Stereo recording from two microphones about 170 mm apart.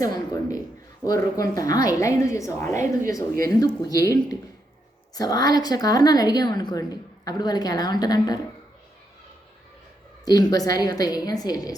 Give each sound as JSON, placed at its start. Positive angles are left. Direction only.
{"t": 0.0, "sound": "a woman's voice", "side_deg": 20}
{"t": 10.2, "sound": "a woman's voice", "side_deg": 20}